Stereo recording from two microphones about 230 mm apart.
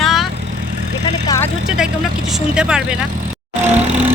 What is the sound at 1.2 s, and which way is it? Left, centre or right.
Speech, centre.